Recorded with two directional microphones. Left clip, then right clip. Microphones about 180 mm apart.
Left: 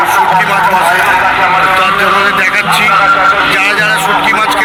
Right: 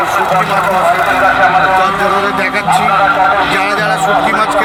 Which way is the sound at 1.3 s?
65° right (ahead or behind).